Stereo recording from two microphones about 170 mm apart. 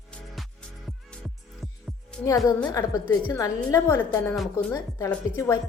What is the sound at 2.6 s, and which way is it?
A woman's voice, 20° left (ahead or behind).